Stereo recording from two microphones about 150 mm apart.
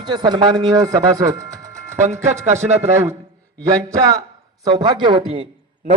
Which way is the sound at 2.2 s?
50° right (ahead or behind).